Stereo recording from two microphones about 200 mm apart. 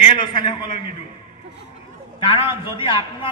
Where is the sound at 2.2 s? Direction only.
25° left (ahead or behind).